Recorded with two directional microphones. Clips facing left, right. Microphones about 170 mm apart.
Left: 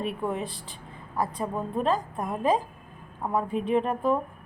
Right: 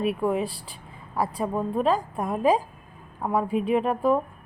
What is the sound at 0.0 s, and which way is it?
A woman's voice, 5° right (ahead or behind).